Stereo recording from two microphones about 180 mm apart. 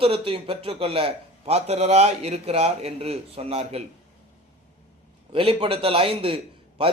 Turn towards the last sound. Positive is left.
turn(degrees=-30)  # may be behind; listen again after turning